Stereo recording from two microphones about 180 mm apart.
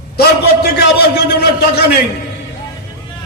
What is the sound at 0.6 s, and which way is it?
A man's voice, 60° left (ahead or behind).